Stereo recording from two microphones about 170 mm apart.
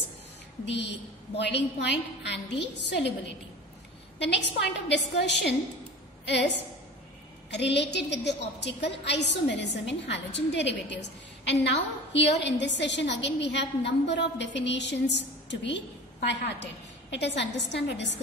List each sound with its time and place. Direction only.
0.7 s a woman's voice: 90° left
4.8 s a woman's voice: 90° left
7.5 s a woman's voice: 90° left